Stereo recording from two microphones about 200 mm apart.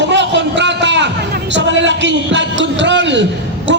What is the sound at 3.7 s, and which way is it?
Music, 65° right (ahead or behind).